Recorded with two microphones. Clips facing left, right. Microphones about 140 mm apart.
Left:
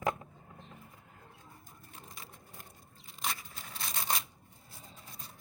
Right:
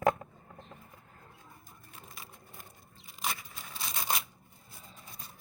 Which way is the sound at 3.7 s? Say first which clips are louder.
Right 1 dB; 5° right (ahead or behind).